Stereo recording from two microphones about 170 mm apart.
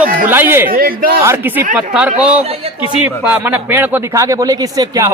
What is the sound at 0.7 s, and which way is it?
Speech, 60° right (ahead or behind).